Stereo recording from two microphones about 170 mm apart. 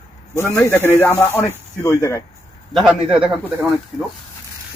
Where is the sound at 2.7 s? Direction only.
Centre (ahead or behind).